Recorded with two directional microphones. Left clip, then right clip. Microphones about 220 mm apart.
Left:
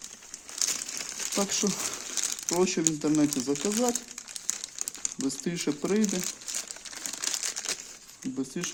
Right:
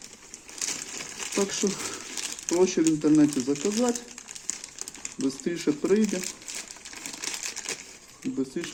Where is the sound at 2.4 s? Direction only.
55° left (ahead or behind).